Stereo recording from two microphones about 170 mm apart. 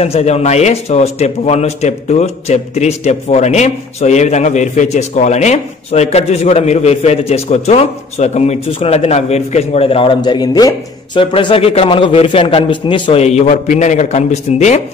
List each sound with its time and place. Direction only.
0.0 s a man's voice: 40° left (ahead or behind)